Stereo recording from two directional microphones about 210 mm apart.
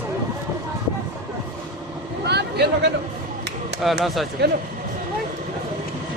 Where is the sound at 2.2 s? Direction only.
55° right (ahead or behind).